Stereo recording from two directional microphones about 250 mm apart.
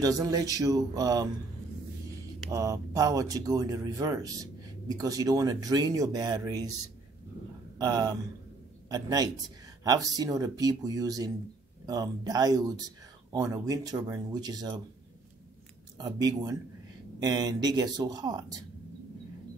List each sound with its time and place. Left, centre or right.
0.0 s speech: centre
2.5 s speech: centre
7.8 s a man's voice: centre
16.0 s speech: centre